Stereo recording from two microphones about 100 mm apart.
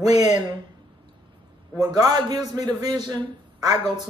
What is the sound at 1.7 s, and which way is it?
Speech, 40° right (ahead or behind).